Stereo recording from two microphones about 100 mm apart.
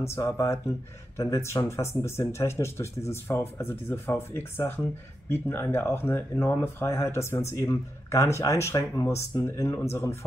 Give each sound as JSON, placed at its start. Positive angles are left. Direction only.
{"t": 0.0, "sound": "speech", "side_deg": 30}